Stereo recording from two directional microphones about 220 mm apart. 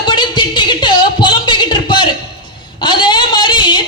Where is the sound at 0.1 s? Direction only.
20° left (ahead or behind).